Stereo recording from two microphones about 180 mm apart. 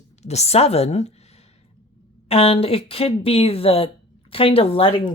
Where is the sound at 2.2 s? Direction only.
35° left (ahead or behind).